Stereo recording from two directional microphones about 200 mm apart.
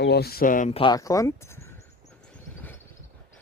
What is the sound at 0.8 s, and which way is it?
Speech, 20° left (ahead or behind).